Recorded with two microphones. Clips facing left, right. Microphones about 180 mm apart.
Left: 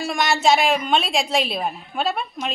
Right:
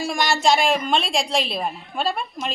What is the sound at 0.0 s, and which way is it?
A woman's voice, centre (ahead or behind).